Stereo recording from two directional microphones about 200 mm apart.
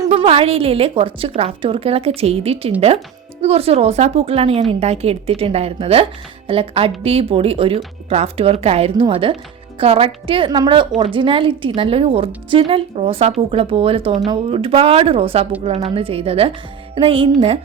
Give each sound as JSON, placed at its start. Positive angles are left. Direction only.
{"t": 0.1, "sound": "a woman's voice", "side_deg": -25}